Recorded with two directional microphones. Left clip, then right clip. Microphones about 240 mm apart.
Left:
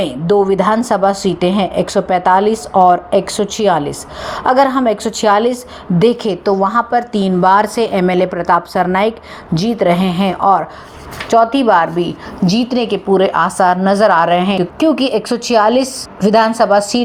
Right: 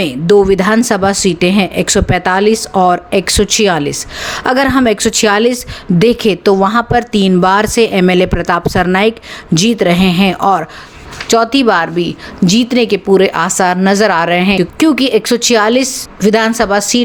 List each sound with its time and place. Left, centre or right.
0.0 s a woman's voice: right